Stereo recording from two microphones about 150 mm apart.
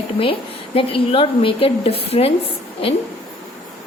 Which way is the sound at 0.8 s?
40° left (ahead or behind).